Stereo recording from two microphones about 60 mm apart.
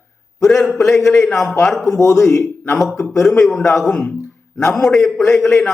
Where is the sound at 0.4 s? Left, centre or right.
Centre.